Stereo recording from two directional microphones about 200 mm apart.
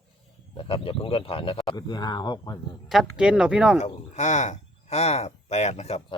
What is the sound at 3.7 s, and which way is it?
Speech, 35° left (ahead or behind).